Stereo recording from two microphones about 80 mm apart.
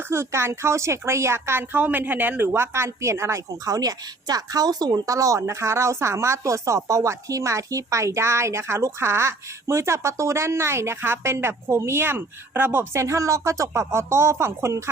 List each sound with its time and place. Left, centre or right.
0.0 s speech: right
1.7 s speech: right